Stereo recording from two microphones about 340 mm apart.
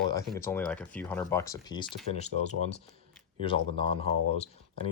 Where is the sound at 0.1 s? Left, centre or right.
Centre.